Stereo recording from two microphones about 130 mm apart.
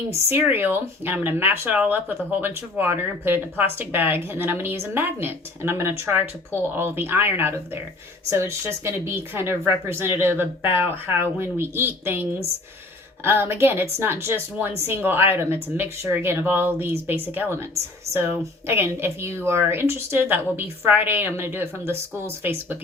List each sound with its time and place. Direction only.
0.3 s speech: 15° right (ahead or behind)